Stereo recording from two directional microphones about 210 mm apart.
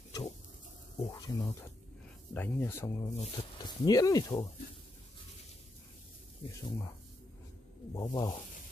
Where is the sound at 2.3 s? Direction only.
10° left (ahead or behind).